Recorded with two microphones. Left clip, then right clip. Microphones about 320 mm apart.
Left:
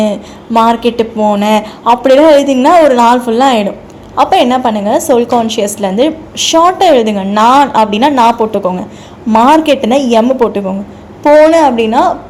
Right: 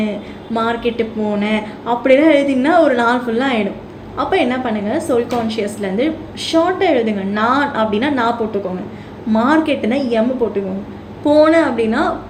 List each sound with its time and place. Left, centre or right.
0.5 s a woman's voice: left